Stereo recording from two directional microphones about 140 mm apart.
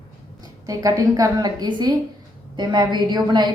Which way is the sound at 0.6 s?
25° right (ahead or behind).